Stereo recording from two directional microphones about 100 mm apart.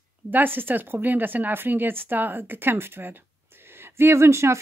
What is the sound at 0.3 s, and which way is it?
Speech, 20° right (ahead or behind).